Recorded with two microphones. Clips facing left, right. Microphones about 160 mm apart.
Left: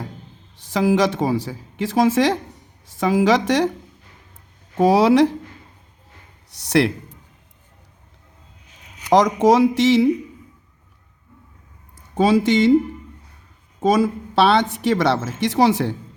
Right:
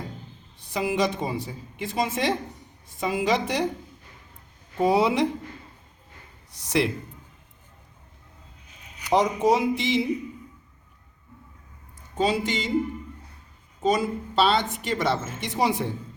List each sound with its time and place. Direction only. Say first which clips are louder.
0.5 s a woman's voice: left 8 dB; 90° left
4.8 s a woman's voice: left 7 dB; 90° left
6.5 s a man's voice: left 6 dB; 75° left (ahead or behind)
9.0 s a woman's voice: left 6 dB; 90° left
12.1 s a woman's voice: left 9 dB; 85° left
14.3 s a woman's voice: left 6 dB; 75° left (ahead or behind)